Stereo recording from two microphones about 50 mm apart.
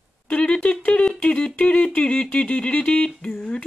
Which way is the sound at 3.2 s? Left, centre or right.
Centre.